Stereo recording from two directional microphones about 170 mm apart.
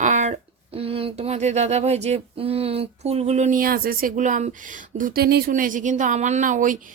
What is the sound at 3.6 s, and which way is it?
Speech, 60° right (ahead or behind).